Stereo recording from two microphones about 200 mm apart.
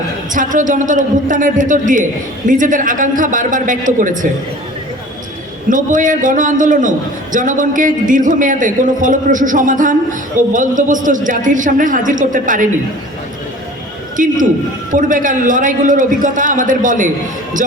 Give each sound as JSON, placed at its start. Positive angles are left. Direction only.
{"t": 0.3, "sound": "a man's voice", "side_deg": -40}
{"t": 5.6, "sound": "a man's voice", "side_deg": -40}
{"t": 14.2, "sound": "a man's voice", "side_deg": -40}